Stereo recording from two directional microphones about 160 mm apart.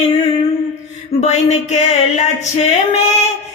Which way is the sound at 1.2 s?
45° left (ahead or behind).